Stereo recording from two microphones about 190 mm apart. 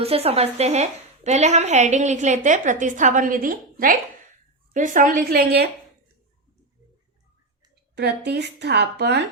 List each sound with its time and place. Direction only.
0.0 s a woman's voice: 30° right (ahead or behind); by 5.6 s 55° right (ahead or behind)
7.9 s speech: 60° right (ahead or behind)